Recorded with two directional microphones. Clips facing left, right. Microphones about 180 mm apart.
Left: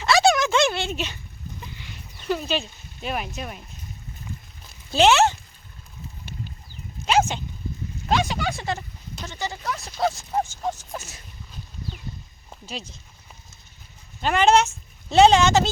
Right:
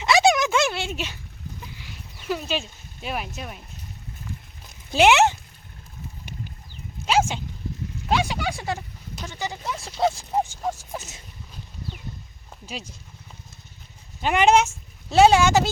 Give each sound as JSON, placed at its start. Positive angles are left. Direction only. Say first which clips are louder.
{"t": 0.0, "sound": "a sound", "louder": "even", "side_deg": -20}
{"t": 0.5, "sound": "a sound", "louder": "left 2 dB", "side_deg": -5}
{"t": 4.7, "sound": "speech", "louder": "even", "side_deg": -15}
{"t": 7.0, "sound": "dog", "louder": "left 1 dB", "side_deg": -5}
{"t": 8.0, "sound": "speech", "louder": "left 1 dB", "side_deg": -10}
{"t": 9.7, "sound": "speech", "louder": "right 3 dB", "side_deg": -30}
{"t": 10.3, "sound": "speech", "louder": "right 1 dB", "side_deg": -15}
{"t": 12.6, "sound": "speech", "louder": "even", "side_deg": -10}
{"t": 14.2, "sound": "speech", "louder": "even", "side_deg": -15}